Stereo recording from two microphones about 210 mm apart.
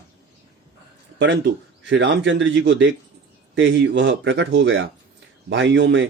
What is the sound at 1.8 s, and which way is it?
Speech, 60° right (ahead or behind).